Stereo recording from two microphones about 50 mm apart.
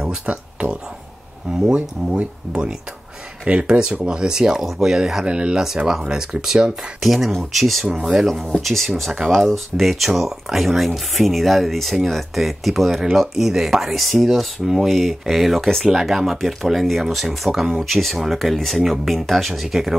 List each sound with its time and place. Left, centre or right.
0.0 s speech: centre
0.6 s a sound: right
1.7 s speech: right; by 5.2 s centre
5.2 s speech: right; by 7.8 s centre
7.8 s speech: centre
8.5 s speech: centre